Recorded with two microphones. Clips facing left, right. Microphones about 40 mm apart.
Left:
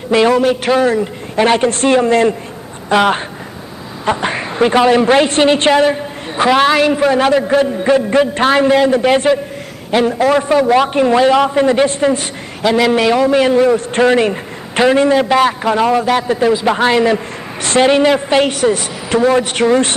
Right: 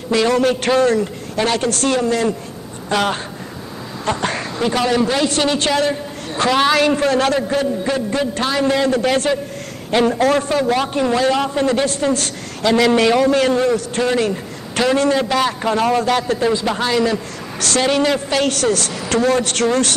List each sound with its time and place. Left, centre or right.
0.1 s a man's voice: left
0.4 s a man's voice: centre
1.3 s a man's voice: left
7.5 s a man's voice: left
8.6 s a man's voice: left
9.8 s a man's voice: centre; by 12.3 s left
12.6 s a man's voice: centre
13.7 s a man's voice: left; by 16.7 s centre
16.7 s a man's voice: left